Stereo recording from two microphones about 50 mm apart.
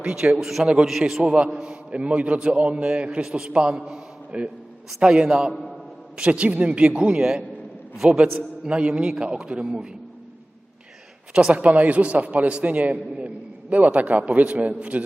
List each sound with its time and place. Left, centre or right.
0.0 s a man's voice: centre
1.2 s a man's voice: right
1.5 s a man's voice: centre
1.7 s a man's voice: right
11.5 s a man's voice: right